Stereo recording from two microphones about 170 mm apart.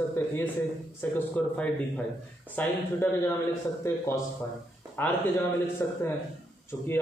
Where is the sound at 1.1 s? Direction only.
10° left (ahead or behind).